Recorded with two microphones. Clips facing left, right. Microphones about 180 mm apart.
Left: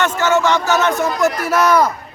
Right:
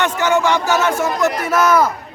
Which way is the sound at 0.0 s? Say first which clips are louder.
Left 1 dB; 15° right (ahead or behind).